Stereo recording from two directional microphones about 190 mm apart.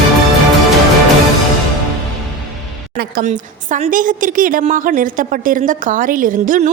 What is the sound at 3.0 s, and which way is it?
A woman's voice, 45° right (ahead or behind).